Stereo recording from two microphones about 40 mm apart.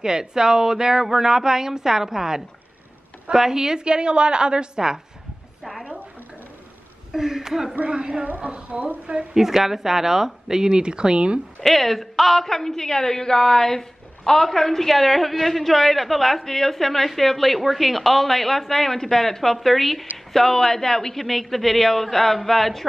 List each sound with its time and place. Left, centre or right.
0.0 s a woman's voice: centre
5.6 s a sound: centre
7.1 s speech: centre
7.9 s a woman's voice: right
8.6 s speech: right
9.3 s speech: centre; by 11.4 s right
11.6 s a woman's voice: centre